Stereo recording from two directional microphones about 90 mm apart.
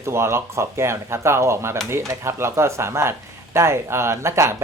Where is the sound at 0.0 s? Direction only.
30° right (ahead or behind).